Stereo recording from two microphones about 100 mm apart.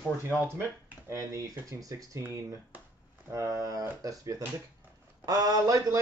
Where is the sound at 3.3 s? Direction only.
35° right (ahead or behind).